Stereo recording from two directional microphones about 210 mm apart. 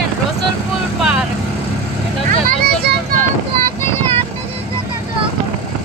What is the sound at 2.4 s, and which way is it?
Vehicle, 45° right (ahead or behind).